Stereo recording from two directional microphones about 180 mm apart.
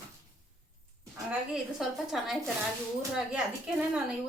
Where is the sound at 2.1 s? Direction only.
Centre (ahead or behind).